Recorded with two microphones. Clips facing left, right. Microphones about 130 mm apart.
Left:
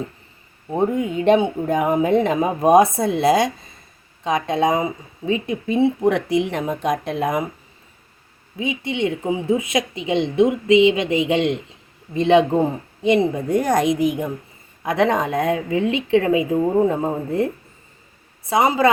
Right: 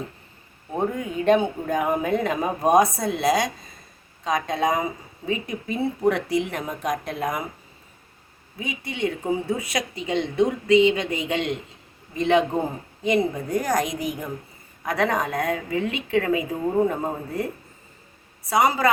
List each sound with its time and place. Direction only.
0.7 s speech: 25° left (ahead or behind)
8.5 s speech: 20° left (ahead or behind)